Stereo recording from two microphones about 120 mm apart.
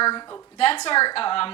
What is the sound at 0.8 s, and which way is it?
Speech, 50° left (ahead or behind).